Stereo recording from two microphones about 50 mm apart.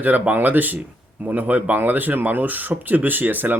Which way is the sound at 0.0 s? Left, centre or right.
Right.